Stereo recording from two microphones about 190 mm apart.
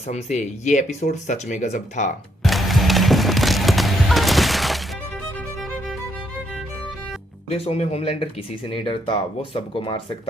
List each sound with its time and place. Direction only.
0.1 s speech: 35° left (ahead or behind)
2.4 s music: centre (ahead or behind)
7.5 s speech: 30° left (ahead or behind)